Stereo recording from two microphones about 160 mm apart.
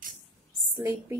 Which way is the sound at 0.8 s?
20° right (ahead or behind).